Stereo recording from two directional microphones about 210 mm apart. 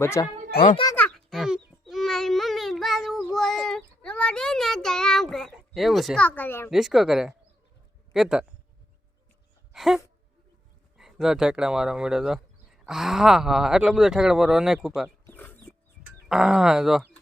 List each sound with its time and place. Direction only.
0.0 s a child's voice: 10° left (ahead or behind)
0.5 s a child's voice: 40° left (ahead or behind)
0.9 s a sound: 5° left (ahead or behind)
6.7 s speech: centre (ahead or behind)
9.7 s a sound: centre (ahead or behind)
10.9 s speech: centre (ahead or behind)
15.3 s chicken: 10° left (ahead or behind)
16.0 s speech: centre (ahead or behind)